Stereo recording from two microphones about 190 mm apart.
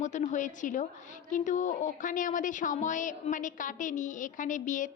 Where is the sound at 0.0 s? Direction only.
40° left (ahead or behind).